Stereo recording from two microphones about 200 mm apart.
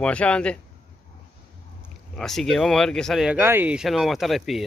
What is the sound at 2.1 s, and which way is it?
Speech, centre (ahead or behind).